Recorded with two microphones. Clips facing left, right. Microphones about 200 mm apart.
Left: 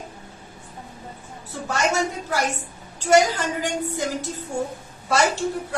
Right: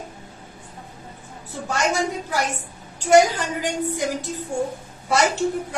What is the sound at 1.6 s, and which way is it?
A woman's voice, 15° right (ahead or behind).